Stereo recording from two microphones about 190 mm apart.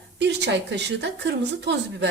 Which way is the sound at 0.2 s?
65° right (ahead or behind).